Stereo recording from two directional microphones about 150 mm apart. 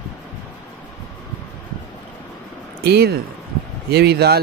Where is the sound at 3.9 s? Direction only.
90° right.